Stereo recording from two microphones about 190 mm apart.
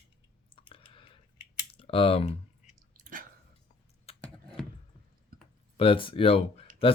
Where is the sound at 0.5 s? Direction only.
25° left (ahead or behind).